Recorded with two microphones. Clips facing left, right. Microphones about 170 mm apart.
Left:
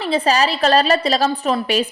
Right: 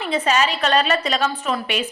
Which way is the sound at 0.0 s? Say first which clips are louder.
Left 3 dB; 35° left (ahead or behind).